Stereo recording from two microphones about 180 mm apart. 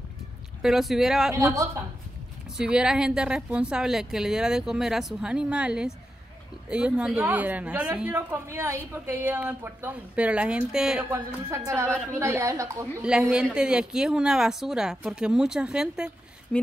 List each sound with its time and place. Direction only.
0.6 s a woman's voice: 5° right (ahead or behind)
2.5 s a woman's voice: 5° right (ahead or behind)
11.1 s a woman's voice: 15° right (ahead or behind)
13.0 s a woman's voice: 5° right (ahead or behind)